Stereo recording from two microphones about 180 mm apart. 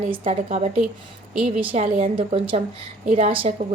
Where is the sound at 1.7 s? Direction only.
40° right (ahead or behind).